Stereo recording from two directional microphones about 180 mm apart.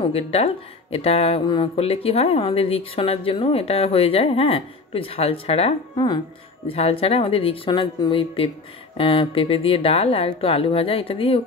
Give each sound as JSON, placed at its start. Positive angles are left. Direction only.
{"t": 0.0, "sound": "speech", "side_deg": 30}